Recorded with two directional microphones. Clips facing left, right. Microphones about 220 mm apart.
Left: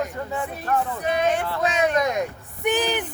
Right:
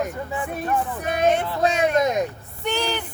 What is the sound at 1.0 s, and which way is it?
Speech, 50° right (ahead or behind).